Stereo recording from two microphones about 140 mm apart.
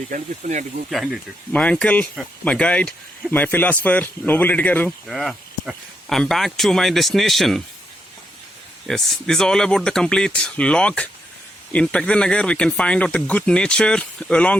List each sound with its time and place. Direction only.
0.1 s speech: 65° right (ahead or behind)
0.9 s speech: centre (ahead or behind)
5.0 s speech: centre (ahead or behind)
8.9 s speech: 5° left (ahead or behind)